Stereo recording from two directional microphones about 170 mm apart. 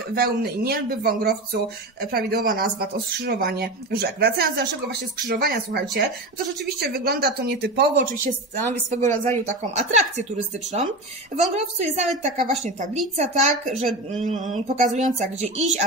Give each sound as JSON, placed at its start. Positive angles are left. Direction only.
{"t": 0.1, "sound": "a woman's voice", "side_deg": -65}